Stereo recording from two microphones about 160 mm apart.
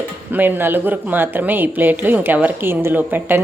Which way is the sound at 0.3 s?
10° right (ahead or behind).